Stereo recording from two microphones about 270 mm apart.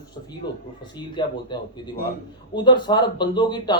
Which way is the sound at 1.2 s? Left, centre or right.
Centre.